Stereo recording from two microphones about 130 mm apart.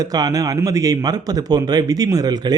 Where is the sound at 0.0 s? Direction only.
30° right (ahead or behind).